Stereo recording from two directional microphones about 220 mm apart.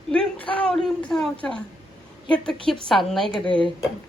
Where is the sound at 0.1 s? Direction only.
5° left (ahead or behind).